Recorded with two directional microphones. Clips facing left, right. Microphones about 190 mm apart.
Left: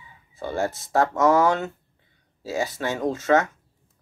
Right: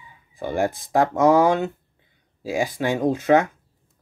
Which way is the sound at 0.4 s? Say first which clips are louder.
Right 3 dB; 15° right (ahead or behind).